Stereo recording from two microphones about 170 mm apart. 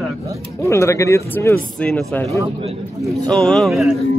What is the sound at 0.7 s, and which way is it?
Speech, 15° left (ahead or behind).